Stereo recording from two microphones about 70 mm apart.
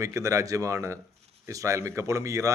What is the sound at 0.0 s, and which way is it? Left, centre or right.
Speech, right.